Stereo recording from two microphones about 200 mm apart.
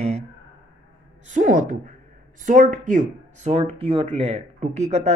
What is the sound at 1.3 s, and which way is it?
Speech, 40° right (ahead or behind).